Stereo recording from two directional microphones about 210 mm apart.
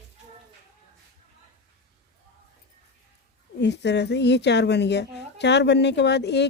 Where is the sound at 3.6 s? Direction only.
55° left (ahead or behind).